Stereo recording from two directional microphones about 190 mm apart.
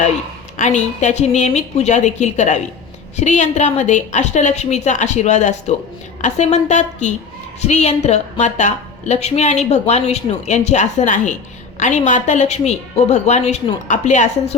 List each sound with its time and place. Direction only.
1.0 s a woman's voice: 35° left (ahead or behind)